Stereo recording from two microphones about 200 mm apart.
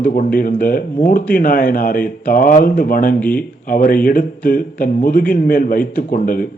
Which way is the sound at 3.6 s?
45° left (ahead or behind).